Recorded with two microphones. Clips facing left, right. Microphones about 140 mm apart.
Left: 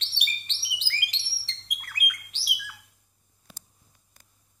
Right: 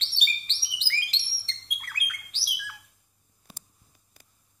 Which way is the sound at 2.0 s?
15° left (ahead or behind).